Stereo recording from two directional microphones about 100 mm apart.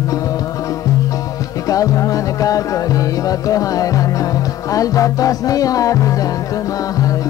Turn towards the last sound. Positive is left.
turn(degrees=35)  # may be behind; listen again after turning